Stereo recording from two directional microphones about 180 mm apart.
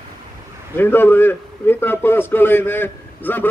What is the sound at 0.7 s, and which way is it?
A man's voice, 10° left (ahead or behind).